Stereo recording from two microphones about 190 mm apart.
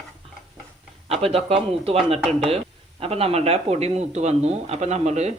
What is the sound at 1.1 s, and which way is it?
Speech, 30° right (ahead or behind).